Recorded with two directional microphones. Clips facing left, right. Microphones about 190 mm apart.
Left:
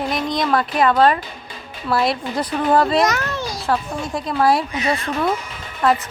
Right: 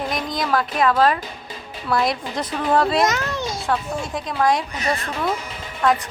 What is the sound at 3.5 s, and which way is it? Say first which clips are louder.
Speech: left 4 dB; centre (ahead or behind).